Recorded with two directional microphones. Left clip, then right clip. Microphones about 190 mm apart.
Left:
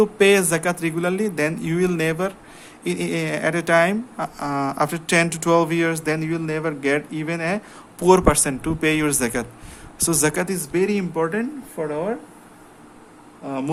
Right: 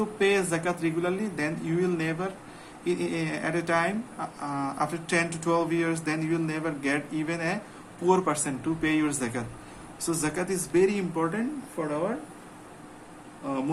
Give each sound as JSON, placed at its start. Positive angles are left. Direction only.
{"t": 0.0, "sound": "speech", "side_deg": 55}